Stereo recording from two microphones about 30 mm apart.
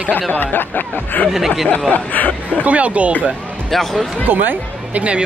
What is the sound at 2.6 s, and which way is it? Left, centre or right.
Speech, right.